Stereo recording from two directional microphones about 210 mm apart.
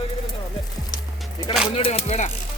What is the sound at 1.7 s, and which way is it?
Music, 30° left (ahead or behind).